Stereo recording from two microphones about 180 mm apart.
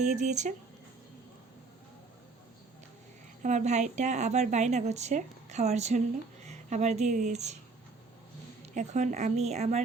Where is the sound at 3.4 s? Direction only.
40° right (ahead or behind).